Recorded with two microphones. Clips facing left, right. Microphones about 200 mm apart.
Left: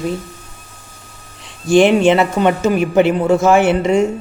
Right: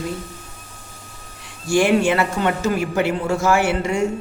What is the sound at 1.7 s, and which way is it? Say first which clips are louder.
A man's voice: left 6 dB; 20° left (ahead or behind).